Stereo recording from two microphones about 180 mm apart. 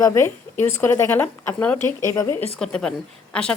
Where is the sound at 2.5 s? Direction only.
5° left (ahead or behind).